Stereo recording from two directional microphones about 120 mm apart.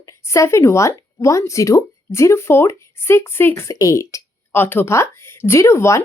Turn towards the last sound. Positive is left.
turn(degrees=25)  # may be behind; listen again after turning